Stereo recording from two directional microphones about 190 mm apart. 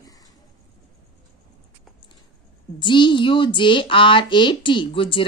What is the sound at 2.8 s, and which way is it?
Speech, 25° left (ahead or behind).